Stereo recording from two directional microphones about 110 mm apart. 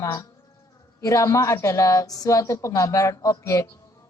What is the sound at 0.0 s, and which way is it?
A woman's voice, 30° left (ahead or behind).